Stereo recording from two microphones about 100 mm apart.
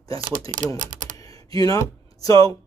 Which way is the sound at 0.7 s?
35° left (ahead or behind).